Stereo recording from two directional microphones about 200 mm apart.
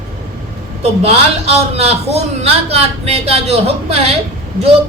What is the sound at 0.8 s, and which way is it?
A woman's voice, 30° right (ahead or behind).